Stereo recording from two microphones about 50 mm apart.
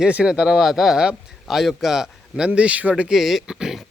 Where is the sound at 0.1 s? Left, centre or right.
Centre.